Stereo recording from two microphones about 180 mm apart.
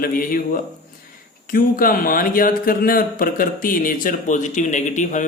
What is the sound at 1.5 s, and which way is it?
Speech, 50° left (ahead or behind).